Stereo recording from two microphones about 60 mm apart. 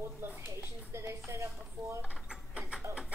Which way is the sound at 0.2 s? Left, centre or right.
Right.